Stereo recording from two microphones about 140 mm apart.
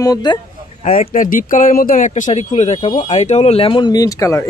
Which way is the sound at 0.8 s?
45° left (ahead or behind).